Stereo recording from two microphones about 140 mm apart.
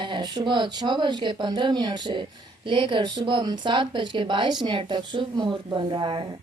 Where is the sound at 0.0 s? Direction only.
35° right (ahead or behind).